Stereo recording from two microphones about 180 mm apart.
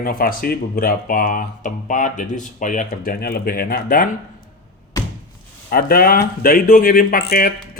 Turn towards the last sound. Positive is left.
turn(degrees=55)  # may be behind; listen again after turning